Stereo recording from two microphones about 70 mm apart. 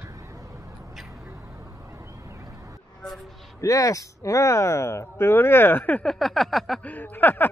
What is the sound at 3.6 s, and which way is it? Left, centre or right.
Speech, left.